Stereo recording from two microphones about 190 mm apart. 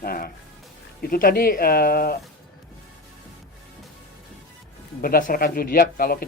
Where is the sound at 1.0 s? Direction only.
50° left (ahead or behind).